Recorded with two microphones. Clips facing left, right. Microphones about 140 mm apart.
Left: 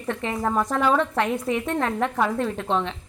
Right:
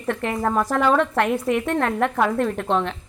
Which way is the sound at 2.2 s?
60° right (ahead or behind).